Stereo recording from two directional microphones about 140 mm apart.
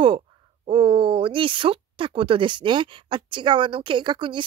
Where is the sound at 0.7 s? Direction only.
40° right (ahead or behind).